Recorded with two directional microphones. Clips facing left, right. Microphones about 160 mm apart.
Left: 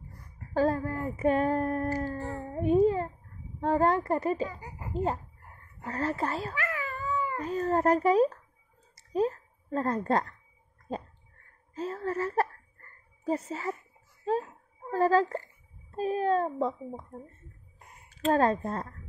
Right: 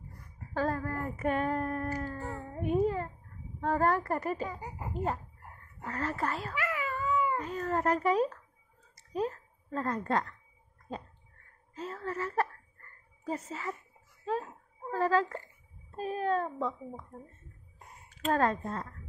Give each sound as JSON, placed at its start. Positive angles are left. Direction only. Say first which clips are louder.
{"t": 0.6, "sound": "a woman's voice", "louder": "left 5 dB", "side_deg": 25}
{"t": 1.3, "sound": "a sound", "louder": "left 4 dB", "side_deg": 35}
{"t": 3.6, "sound": "a woman's voice", "louder": "left 3 dB", "side_deg": 25}
{"t": 6.7, "sound": "cat", "louder": "right 1 dB", "side_deg": -15}
{"t": 7.3, "sound": "a child's voice", "louder": "left 4 dB", "side_deg": 35}
{"t": 8.9, "sound": "a sound", "louder": "left 5 dB", "side_deg": 35}
{"t": 11.7, "sound": "a child's voice", "louder": "left 5 dB", "side_deg": 40}
{"t": 14.9, "sound": "a child's voice", "louder": "left 4 dB", "side_deg": 35}